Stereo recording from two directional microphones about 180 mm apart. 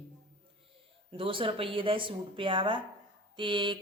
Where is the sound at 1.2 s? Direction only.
30° right (ahead or behind).